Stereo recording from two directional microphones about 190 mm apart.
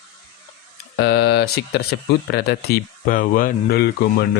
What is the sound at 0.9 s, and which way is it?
Speech, 60° left (ahead or behind).